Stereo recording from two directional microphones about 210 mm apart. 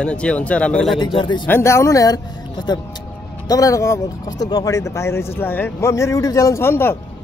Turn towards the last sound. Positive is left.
turn(degrees=10)  # may be behind; listen again after turning